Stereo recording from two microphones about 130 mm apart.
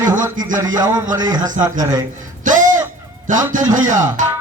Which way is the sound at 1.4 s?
80° right.